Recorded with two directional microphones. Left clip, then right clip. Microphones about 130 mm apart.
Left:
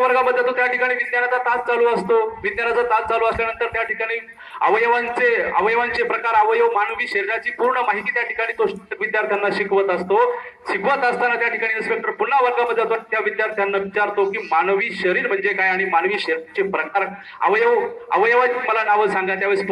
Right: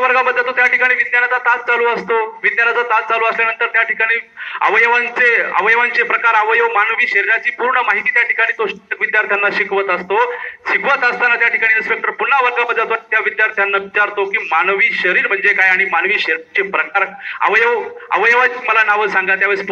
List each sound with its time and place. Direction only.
0.0 s a man's voice: 45° left (ahead or behind)